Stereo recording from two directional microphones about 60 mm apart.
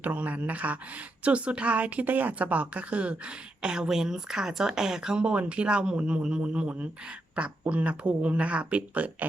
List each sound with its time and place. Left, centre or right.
0.0 s a woman's voice: right